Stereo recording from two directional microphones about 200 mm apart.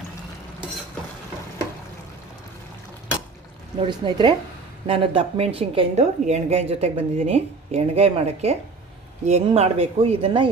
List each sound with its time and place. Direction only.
3.8 s a woman's voice: 25° right (ahead or behind)